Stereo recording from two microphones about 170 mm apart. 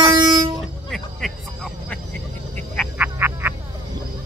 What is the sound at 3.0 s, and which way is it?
Frog, 10° right (ahead or behind).